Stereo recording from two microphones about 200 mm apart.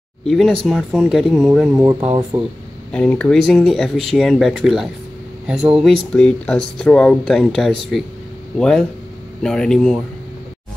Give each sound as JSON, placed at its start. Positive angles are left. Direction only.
{"t": 0.3, "sound": "speech", "side_deg": 0}
{"t": 1.8, "sound": "speech", "side_deg": -15}
{"t": 2.9, "sound": "speech", "side_deg": 5}